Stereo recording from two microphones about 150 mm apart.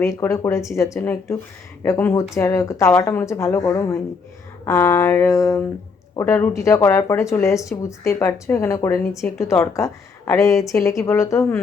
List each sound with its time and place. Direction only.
0.0 s speech: 20° left (ahead or behind)